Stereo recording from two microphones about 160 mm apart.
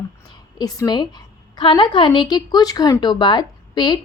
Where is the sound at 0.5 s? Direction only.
25° left (ahead or behind).